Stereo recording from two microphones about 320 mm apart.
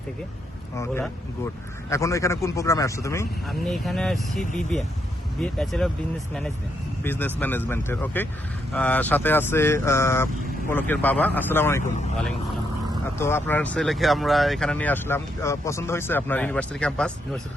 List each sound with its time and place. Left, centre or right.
0.8 s speech: centre
7.0 s speech: centre
13.1 s speech: centre